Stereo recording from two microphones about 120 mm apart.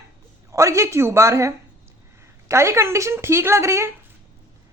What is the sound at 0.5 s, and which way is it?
Speech, 25° right (ahead or behind).